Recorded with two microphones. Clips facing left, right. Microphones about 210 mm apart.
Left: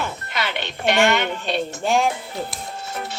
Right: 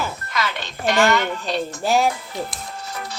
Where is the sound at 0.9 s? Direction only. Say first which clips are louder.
Even; 25° left (ahead or behind).